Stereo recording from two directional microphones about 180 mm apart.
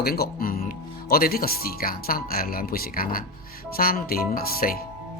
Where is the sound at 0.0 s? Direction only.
55° left (ahead or behind).